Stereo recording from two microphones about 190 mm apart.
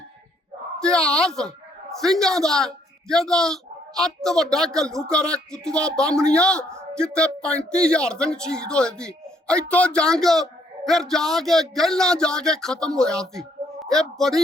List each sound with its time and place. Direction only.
0.8 s a man's voice: 5° left (ahead or behind)